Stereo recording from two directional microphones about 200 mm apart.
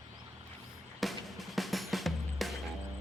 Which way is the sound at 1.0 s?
Centre (ahead or behind).